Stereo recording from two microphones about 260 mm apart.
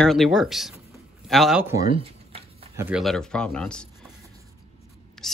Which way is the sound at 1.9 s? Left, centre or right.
Right.